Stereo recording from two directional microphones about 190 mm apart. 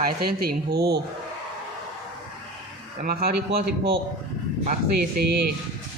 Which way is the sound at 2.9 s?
50° right (ahead or behind).